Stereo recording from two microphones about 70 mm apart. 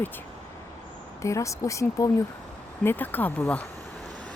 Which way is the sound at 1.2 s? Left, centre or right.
Left.